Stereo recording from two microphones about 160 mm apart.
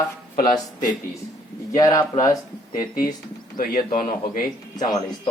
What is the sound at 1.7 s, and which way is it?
Speech, 25° left (ahead or behind).